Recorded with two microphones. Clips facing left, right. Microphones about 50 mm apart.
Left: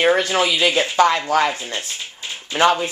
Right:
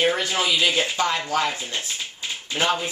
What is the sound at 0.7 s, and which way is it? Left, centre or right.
Speech, left.